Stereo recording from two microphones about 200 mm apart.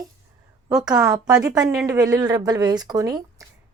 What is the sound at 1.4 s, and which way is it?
Speech, 15° right (ahead or behind).